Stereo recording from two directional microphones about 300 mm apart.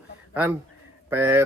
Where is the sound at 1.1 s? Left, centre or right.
Centre.